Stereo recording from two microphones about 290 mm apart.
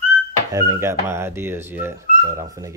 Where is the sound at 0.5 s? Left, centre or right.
Centre.